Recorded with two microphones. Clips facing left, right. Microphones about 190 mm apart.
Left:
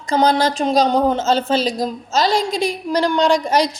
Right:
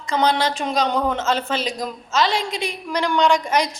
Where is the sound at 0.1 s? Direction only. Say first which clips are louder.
Left 4 dB; 40° left (ahead or behind).